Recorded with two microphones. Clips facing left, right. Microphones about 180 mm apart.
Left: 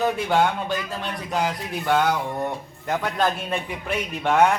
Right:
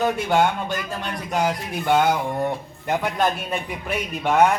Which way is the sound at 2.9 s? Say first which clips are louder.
Right 1 dB; 15° right (ahead or behind).